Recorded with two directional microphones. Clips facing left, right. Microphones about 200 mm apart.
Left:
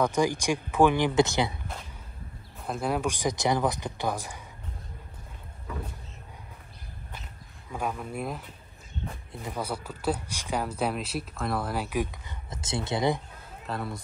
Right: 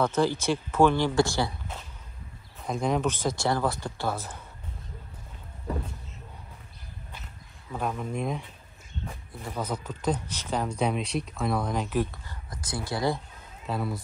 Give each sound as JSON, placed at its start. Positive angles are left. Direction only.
{"t": 0.0, "sound": "speech", "side_deg": 15}
{"t": 2.6, "sound": "speech", "side_deg": 5}
{"t": 5.7, "sound": "vehicle", "side_deg": -35}
{"t": 7.7, "sound": "speech", "side_deg": 5}
{"t": 9.5, "sound": "speech", "side_deg": 10}
{"t": 13.7, "sound": "speech", "side_deg": 0}